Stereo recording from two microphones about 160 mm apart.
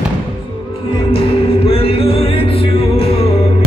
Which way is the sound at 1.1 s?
35° left (ahead or behind).